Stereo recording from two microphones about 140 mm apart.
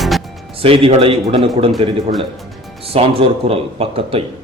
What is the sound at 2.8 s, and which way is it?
Speech, 40° right (ahead or behind).